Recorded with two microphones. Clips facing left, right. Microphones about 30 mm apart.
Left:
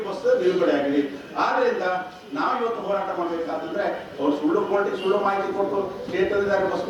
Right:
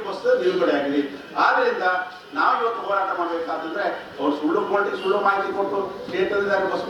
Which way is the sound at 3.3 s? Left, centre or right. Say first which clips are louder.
Right 1 dB; right.